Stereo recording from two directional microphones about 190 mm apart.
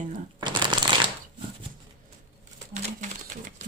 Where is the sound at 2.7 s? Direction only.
40° right (ahead or behind).